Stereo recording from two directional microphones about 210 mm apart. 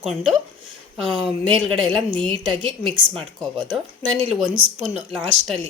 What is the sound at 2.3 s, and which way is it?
Speech, 25° right (ahead or behind).